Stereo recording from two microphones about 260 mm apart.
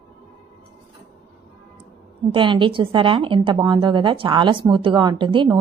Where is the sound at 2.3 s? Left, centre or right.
Centre.